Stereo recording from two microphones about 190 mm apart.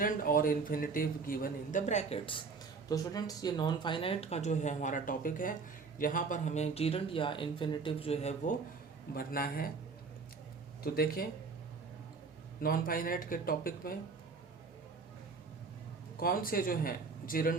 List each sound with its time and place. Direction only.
0.0 s a man's voice: 50° left (ahead or behind); by 2.4 s 30° left (ahead or behind)
2.9 s speech: 20° left (ahead or behind); by 8.5 s 35° left (ahead or behind)
9.1 s a man's voice: 50° left (ahead or behind)
10.9 s a man's voice: 50° left (ahead or behind)
12.6 s a man's voice: 50° left (ahead or behind)
16.2 s a man's voice: 50° left (ahead or behind)